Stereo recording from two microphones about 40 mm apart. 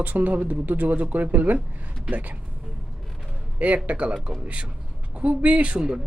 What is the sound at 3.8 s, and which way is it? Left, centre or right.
Speech, right.